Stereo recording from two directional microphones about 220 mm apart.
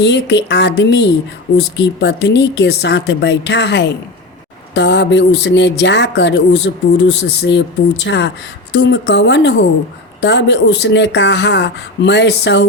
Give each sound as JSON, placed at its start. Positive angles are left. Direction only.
{"t": 0.0, "sound": "speech", "side_deg": 50}